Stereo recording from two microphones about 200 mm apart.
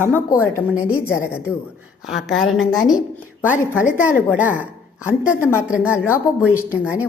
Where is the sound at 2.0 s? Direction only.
Centre (ahead or behind).